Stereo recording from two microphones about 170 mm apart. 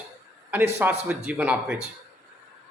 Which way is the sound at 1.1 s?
10° right (ahead or behind).